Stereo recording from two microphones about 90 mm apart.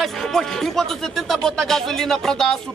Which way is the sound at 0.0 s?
5° left (ahead or behind).